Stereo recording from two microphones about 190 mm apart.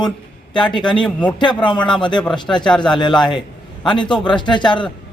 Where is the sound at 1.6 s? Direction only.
25° left (ahead or behind).